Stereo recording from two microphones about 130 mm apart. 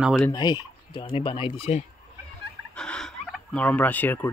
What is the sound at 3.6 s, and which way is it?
Speech, 10° left (ahead or behind).